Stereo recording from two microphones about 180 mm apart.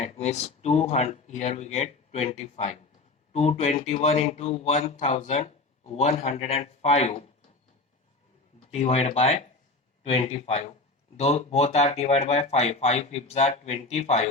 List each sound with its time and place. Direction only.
0.0 s a man's voice: 40° left (ahead or behind)
8.7 s a man's voice: 35° left (ahead or behind)